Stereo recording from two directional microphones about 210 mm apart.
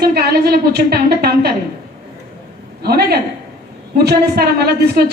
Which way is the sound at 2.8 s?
50° right (ahead or behind).